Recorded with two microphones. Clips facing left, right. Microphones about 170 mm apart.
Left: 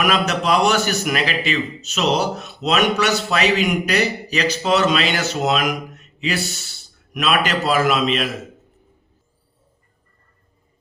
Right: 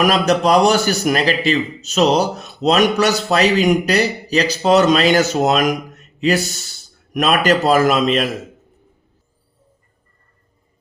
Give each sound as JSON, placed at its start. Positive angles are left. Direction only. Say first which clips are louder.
{"t": 0.0, "sound": "a man's voice", "louder": "right 5 dB", "side_deg": -35}